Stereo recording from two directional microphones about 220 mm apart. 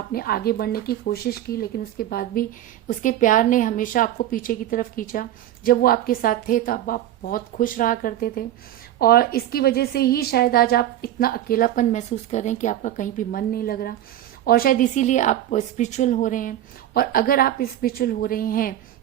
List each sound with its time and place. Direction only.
0.1 s a woman's voice: 45° left (ahead or behind)